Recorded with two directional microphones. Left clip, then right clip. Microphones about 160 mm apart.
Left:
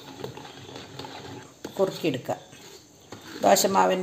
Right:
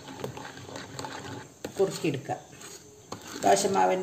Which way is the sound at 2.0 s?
50° left (ahead or behind).